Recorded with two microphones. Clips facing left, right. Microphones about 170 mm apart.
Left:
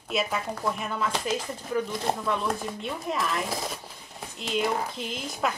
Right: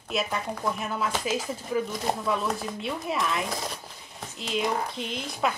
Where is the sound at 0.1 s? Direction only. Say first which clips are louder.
Left 1 dB; centre (ahead or behind).